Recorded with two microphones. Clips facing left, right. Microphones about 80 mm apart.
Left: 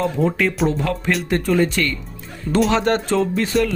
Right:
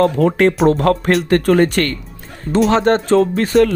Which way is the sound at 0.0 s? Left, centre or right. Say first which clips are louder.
Right 6 dB; right.